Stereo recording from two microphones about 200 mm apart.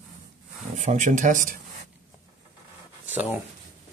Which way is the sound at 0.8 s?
40° right (ahead or behind).